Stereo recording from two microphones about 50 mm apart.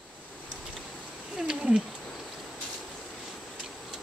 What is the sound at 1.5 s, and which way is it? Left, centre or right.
Cat, centre.